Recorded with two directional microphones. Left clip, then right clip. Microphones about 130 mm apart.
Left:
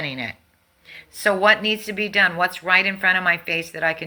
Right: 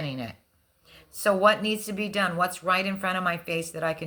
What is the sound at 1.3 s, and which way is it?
Speech, 50° right (ahead or behind).